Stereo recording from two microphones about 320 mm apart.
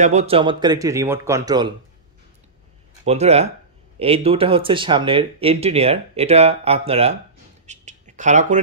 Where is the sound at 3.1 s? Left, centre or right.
Centre.